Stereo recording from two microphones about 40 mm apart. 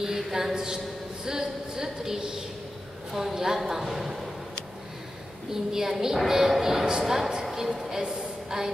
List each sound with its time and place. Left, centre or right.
0.0 s a man's voice: centre
5.5 s a woman's voice: centre
6.9 s a woman's voice: centre